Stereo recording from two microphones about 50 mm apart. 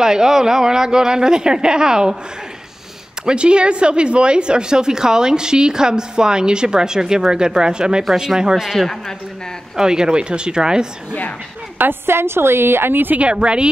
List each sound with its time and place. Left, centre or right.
0.0 s a woman's voice: centre
3.3 s a woman's voice: right
8.7 s a man's voice: centre
9.8 s a woman's voice: centre
11.8 s a woman's voice: right
13.2 s speech: right